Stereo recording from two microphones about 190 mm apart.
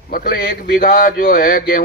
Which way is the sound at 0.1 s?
50° left (ahead or behind).